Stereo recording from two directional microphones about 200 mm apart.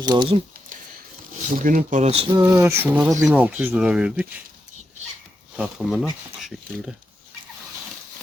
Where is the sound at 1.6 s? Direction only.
40° right (ahead or behind); by 2.4 s 25° right (ahead or behind).